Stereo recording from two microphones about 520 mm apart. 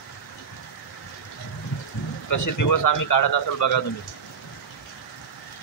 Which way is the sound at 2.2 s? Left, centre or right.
Left.